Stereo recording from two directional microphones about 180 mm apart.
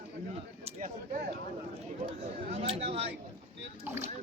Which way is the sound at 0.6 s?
45° right (ahead or behind).